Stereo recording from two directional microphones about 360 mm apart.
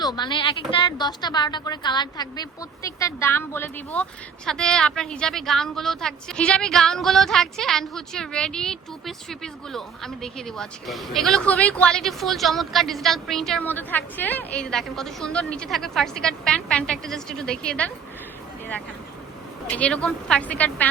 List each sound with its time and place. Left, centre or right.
0.0 s a woman's voice: centre
19.7 s a woman's voice: centre